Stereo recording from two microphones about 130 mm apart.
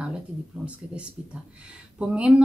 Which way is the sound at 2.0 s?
5° right (ahead or behind).